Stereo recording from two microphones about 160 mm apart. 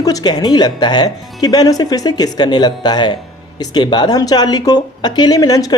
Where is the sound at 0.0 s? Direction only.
20° left (ahead or behind).